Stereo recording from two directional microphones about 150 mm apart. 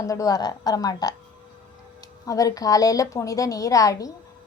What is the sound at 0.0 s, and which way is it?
A woman's voice, 20° left (ahead or behind).